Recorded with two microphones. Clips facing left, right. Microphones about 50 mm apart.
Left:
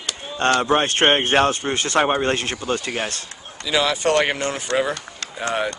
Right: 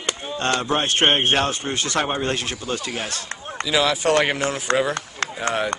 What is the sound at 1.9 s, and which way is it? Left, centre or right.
Speech, left.